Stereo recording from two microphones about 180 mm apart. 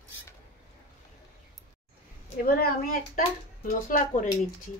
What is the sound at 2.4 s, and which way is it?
A woman's voice, 55° left (ahead or behind).